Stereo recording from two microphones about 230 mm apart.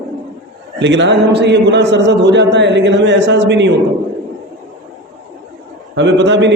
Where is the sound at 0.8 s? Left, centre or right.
Right.